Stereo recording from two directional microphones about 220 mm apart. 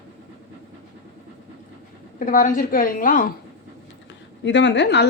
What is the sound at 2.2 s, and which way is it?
A woman's voice, 40° left (ahead or behind).